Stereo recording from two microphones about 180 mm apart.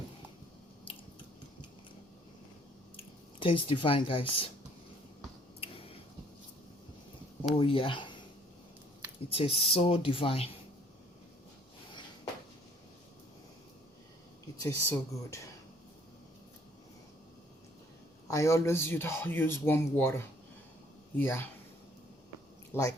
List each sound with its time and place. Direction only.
3.4 s speech: 30° left (ahead or behind)
7.6 s speech: 30° left (ahead or behind)
9.3 s speech: 30° left (ahead or behind)
14.6 s speech: 15° left (ahead or behind)
18.3 s speech: 15° left (ahead or behind)
22.7 s speech: 20° left (ahead or behind)